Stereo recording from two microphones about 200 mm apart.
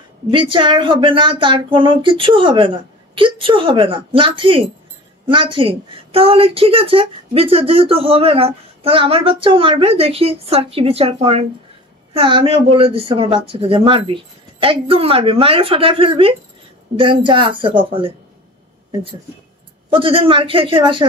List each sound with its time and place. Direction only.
0.3 s a woman's voice: 25° right (ahead or behind)
19.9 s a woman's voice: 25° right (ahead or behind)